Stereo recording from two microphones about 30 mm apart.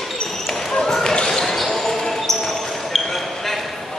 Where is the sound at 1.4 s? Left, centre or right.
Centre.